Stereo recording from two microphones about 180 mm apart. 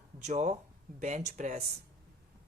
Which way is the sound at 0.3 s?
40° right (ahead or behind).